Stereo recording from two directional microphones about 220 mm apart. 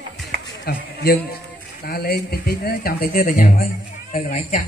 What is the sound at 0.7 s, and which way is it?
Speech, 45° left (ahead or behind).